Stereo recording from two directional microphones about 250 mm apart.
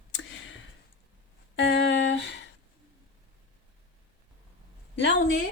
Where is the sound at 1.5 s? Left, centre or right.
Left.